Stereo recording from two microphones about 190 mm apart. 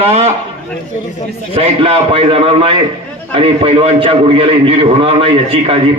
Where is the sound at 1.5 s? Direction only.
30° right (ahead or behind).